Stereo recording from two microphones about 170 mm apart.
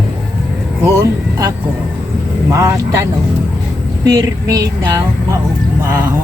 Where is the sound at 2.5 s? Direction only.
15° right (ahead or behind).